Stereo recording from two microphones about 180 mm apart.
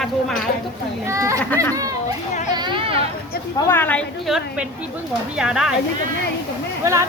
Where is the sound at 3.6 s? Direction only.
10° left (ahead or behind).